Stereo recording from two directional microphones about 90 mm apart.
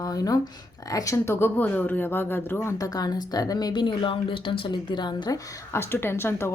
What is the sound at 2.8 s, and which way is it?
Speech, 45° left (ahead or behind).